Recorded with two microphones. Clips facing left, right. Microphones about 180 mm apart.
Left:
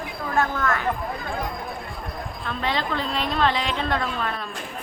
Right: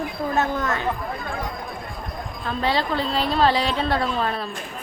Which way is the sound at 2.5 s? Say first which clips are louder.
Right 4 dB; 35° right (ahead or behind).